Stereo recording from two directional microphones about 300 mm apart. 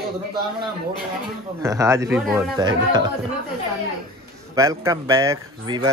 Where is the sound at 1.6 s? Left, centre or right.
Centre.